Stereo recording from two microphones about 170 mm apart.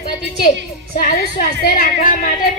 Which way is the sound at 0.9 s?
55° left (ahead or behind).